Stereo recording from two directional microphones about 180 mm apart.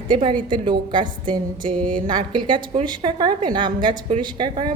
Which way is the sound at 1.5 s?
50° right (ahead or behind).